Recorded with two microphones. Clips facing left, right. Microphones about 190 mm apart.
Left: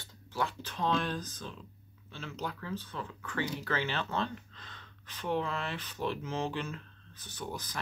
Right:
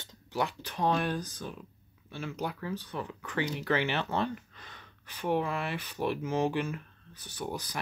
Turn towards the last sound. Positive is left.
turn(degrees=-10)  # may be behind; listen again after turning